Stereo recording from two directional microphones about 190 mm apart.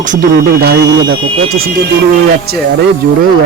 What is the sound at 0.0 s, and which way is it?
Speech, 40° right (ahead or behind).